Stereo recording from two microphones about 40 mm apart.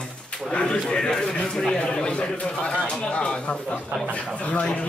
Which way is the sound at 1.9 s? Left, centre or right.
Left.